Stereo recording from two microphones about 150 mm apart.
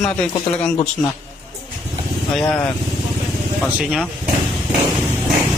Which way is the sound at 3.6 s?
5° right (ahead or behind).